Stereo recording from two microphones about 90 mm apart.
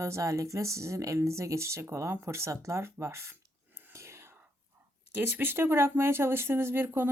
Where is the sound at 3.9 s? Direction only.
30° right (ahead or behind).